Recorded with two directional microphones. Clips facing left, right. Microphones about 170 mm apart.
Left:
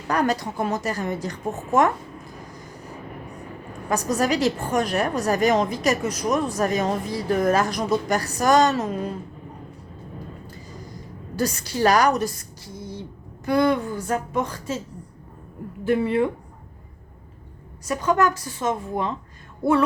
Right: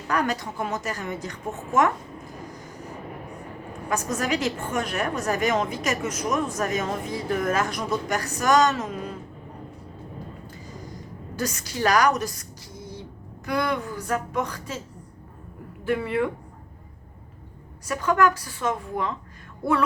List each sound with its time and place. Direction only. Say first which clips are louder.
0.1 s a woman's voice: left 3 dB; 35° left (ahead or behind)
3.8 s a woman's voice: left 4 dB; 35° left (ahead or behind)
11.3 s a woman's voice: left 5 dB; 30° left (ahead or behind)
13.4 s a woman's voice: left 6 dB; 30° left (ahead or behind)
15.8 s a woman's voice: left 4 dB; 25° left (ahead or behind)
17.8 s a woman's voice: left 1 dB; 20° left (ahead or behind)